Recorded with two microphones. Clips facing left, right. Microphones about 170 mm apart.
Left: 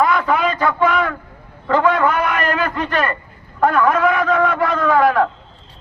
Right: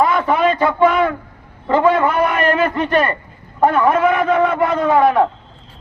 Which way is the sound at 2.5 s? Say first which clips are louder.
Right 4 dB; 25° right (ahead or behind).